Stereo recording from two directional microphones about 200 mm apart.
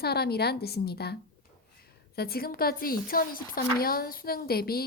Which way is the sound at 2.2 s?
50° left (ahead or behind).